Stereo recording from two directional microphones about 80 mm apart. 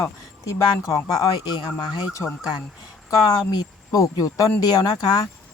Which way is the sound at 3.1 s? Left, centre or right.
Left.